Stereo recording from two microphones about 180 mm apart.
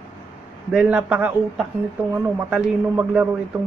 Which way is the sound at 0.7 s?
5° right (ahead or behind).